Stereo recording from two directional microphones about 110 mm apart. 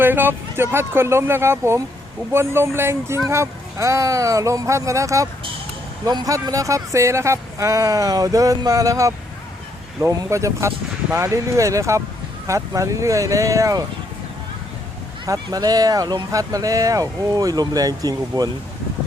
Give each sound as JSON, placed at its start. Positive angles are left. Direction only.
{"t": 0.0, "sound": "speech", "side_deg": -20}
{"t": 15.3, "sound": "speech", "side_deg": -35}